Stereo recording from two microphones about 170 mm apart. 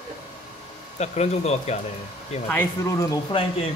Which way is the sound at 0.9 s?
40° left (ahead or behind).